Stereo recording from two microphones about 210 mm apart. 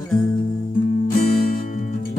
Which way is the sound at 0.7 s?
40° left (ahead or behind).